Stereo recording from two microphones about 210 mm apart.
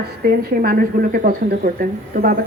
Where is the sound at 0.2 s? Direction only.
45° right (ahead or behind).